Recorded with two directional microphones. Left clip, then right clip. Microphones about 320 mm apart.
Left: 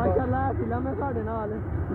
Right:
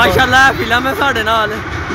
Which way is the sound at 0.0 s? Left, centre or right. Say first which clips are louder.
Right 17 dB; right.